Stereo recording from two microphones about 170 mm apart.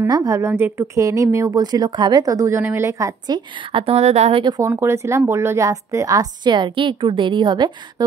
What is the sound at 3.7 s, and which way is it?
Speech, 35° right (ahead or behind).